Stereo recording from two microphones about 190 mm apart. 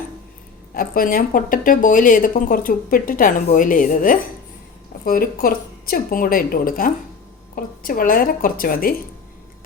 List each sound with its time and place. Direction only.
0.7 s a woman's voice: 50° left (ahead or behind)